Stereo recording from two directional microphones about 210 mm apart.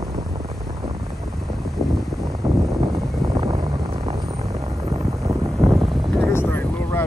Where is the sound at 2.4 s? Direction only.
15° right (ahead or behind).